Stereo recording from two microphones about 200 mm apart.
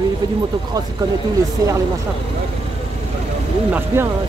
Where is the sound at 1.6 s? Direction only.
15° right (ahead or behind).